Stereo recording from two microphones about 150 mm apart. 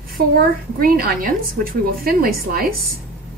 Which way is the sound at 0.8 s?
80° right.